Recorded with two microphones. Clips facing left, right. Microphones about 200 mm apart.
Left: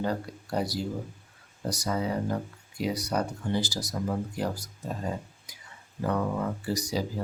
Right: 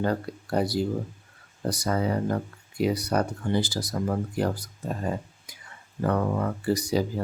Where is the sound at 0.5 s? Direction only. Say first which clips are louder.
Right 5 dB; 55° right (ahead or behind).